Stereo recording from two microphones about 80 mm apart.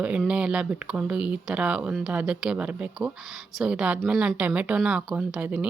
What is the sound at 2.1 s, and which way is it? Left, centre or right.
Speech, centre.